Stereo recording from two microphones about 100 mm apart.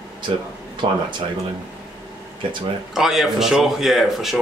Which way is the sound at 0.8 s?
90° right.